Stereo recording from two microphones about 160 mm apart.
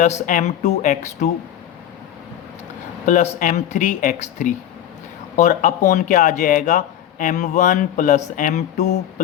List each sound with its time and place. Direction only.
0.3 s speech: 50° left (ahead or behind)
3.1 s speech: 50° left (ahead or behind)